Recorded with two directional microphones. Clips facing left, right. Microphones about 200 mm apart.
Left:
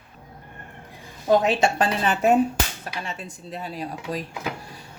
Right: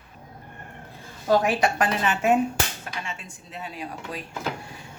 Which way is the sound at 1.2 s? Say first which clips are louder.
Left 2 dB; 20° left (ahead or behind).